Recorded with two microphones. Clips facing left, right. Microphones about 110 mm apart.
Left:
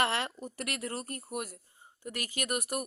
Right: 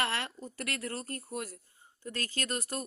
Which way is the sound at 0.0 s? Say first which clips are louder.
Left 3 dB; 20° left (ahead or behind).